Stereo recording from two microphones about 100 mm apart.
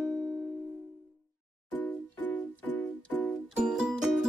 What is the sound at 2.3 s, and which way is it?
Music, 15° left (ahead or behind).